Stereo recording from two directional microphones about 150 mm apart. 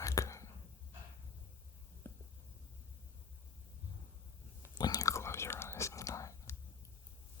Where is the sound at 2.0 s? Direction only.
15° left (ahead or behind).